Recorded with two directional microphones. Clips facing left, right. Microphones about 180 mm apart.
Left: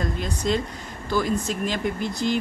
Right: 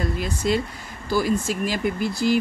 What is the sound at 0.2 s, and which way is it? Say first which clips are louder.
Speech: right 2 dB; 5° right (ahead or behind).